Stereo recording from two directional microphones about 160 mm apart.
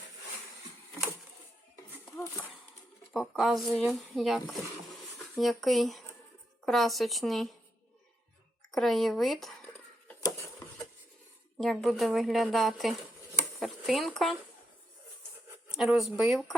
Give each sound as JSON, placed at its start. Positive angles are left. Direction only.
{"t": 1.7, "sound": "a sound", "side_deg": 10}
{"t": 3.1, "sound": "a woman's voice", "side_deg": 0}
{"t": 8.7, "sound": "a woman's voice", "side_deg": 0}
{"t": 11.5, "sound": "a woman's voice", "side_deg": 0}
{"t": 15.7, "sound": "a woman's voice", "side_deg": 0}